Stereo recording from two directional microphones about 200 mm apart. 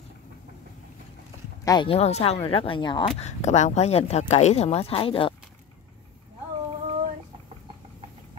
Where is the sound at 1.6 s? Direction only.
20° left (ahead or behind).